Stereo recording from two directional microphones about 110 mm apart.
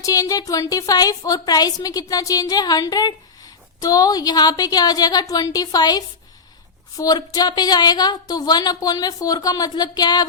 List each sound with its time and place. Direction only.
0.0 s a woman's voice: 30° left (ahead or behind)